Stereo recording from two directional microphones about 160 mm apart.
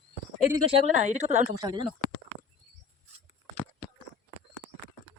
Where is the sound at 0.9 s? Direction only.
45° right (ahead or behind).